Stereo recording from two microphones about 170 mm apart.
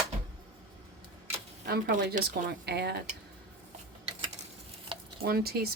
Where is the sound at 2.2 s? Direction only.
75° right (ahead or behind).